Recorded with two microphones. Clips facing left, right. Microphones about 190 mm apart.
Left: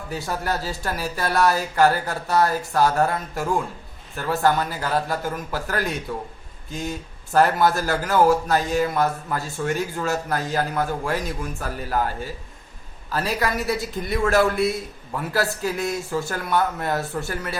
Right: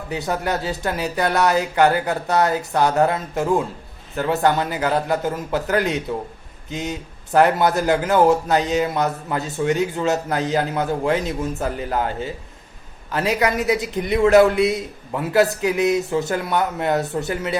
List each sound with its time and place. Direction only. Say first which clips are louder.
0.1 s a man's voice: right 4 dB; 20° right (ahead or behind)